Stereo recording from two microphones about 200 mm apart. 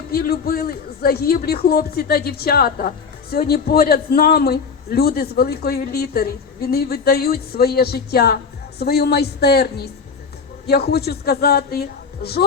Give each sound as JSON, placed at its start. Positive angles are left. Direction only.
{"t": 0.1, "sound": "a man's voice", "side_deg": 50}